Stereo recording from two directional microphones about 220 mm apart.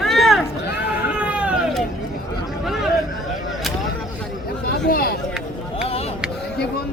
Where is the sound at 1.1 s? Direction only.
5° right (ahead or behind).